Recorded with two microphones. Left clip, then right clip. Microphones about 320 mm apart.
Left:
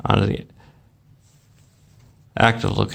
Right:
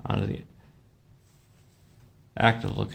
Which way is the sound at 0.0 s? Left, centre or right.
Left.